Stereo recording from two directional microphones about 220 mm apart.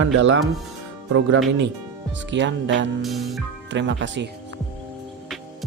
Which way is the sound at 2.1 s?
55° right (ahead or behind).